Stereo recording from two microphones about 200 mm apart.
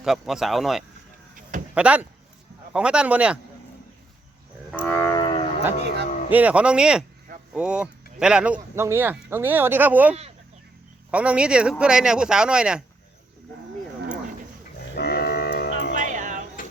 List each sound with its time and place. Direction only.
0.0 s speech: centre (ahead or behind)
4.7 s livestock: 10° left (ahead or behind); by 5.5 s 25° left (ahead or behind)
6.3 s speech: 5° right (ahead or behind)
14.9 s music: 55° left (ahead or behind)
16.0 s music: 40° right (ahead or behind)